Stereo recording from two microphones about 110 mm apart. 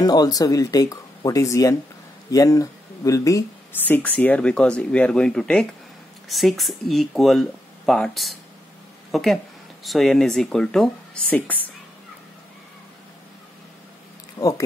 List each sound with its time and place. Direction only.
0.0 s speech: 35° left (ahead or behind)
3.7 s speech: 15° left (ahead or behind)
14.4 s speech: 50° left (ahead or behind)